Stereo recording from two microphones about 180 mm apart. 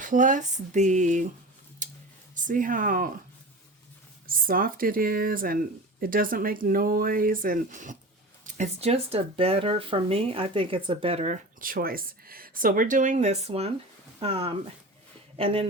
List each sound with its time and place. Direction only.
0.0 s speech: 45° right (ahead or behind)
1.8 s a sound: 45° right (ahead or behind)
2.3 s speech: 45° right (ahead or behind)
4.3 s speech: 50° right (ahead or behind); by 15.6 s 30° right (ahead or behind)